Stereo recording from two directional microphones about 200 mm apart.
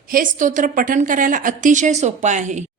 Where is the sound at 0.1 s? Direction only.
40° right (ahead or behind).